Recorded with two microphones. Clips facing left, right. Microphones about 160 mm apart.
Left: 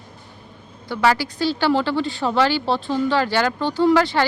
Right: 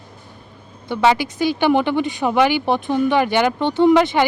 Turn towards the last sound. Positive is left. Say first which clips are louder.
# right 3 dB
turn(degrees=-20)  # may be behind; listen again after turning